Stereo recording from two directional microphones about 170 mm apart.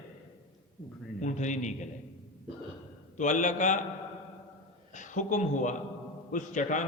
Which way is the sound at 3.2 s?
45° left (ahead or behind).